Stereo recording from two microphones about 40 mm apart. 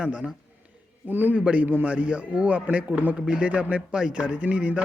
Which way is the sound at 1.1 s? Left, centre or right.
Right.